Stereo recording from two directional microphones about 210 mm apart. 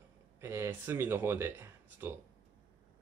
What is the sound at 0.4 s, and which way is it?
Speech, 10° right (ahead or behind).